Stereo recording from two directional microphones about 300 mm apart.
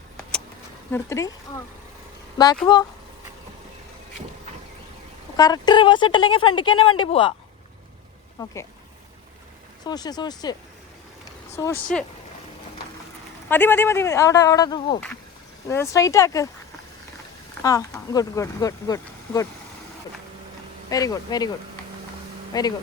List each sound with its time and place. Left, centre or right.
0.9 s speech: centre
5.4 s speech: centre
8.4 s speech: centre
9.8 s speech: centre
13.5 s speech: centre
17.6 s speech: centre
20.9 s speech: centre
22.5 s speech: centre